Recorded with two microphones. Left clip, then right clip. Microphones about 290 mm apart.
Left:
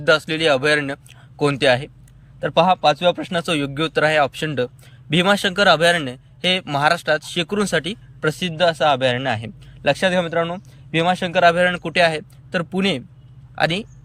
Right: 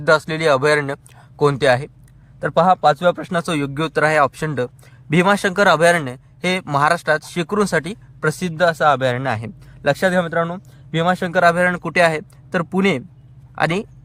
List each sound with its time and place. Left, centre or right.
0.0 s a man's voice: centre